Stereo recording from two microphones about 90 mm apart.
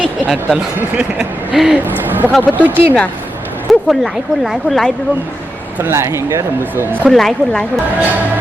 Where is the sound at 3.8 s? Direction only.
Centre (ahead or behind).